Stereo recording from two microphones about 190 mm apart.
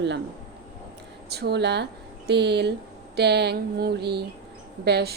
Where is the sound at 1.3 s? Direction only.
60° right (ahead or behind).